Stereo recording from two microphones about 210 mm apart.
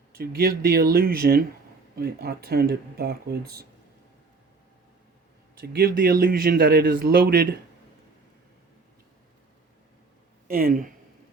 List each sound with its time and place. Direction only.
0.2 s speech: 45° right (ahead or behind)
5.7 s speech: 45° right (ahead or behind)
10.5 s speech: 40° right (ahead or behind)